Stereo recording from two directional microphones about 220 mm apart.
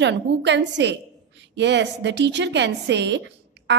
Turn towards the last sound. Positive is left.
turn(degrees=-55)  # may be behind; listen again after turning